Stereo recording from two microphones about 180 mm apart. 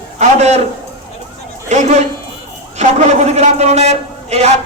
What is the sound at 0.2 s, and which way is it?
Speech, 35° right (ahead or behind).